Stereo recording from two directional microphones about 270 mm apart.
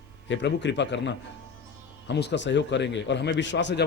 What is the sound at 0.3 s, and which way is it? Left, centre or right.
Speech, left.